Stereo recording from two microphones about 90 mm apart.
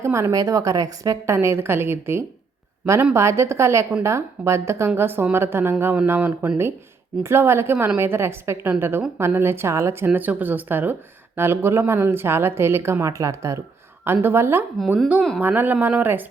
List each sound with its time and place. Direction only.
0.0 s a woman's voice: 35° right (ahead or behind)
1.4 s a woman's voice: 30° right (ahead or behind)